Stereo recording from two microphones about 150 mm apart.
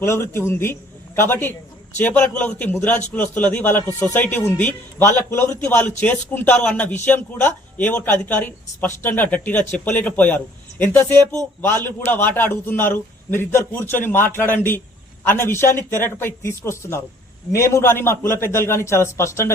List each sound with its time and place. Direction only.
0.0 s a man's voice: 15° left (ahead or behind)